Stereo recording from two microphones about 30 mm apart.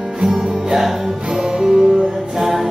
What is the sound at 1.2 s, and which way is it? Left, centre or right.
Music, right.